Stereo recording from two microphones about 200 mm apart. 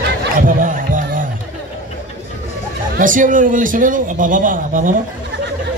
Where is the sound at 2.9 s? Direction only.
40° right (ahead or behind).